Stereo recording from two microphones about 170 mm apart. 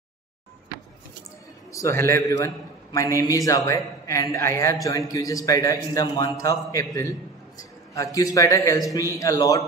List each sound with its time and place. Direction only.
1.7 s a man's voice: 20° left (ahead or behind)